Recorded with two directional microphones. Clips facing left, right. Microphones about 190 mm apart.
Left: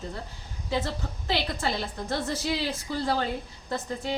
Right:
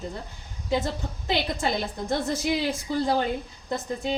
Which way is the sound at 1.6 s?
15° right (ahead or behind).